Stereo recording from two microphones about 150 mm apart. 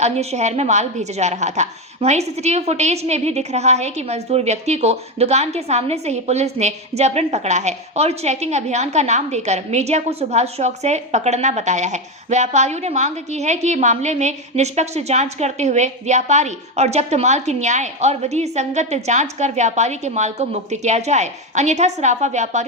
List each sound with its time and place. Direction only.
0.0 s a woman's voice: 45° right (ahead or behind)